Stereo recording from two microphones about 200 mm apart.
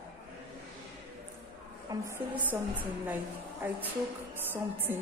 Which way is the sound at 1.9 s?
15° right (ahead or behind).